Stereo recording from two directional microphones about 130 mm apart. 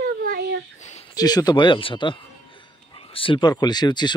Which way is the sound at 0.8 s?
65° left (ahead or behind).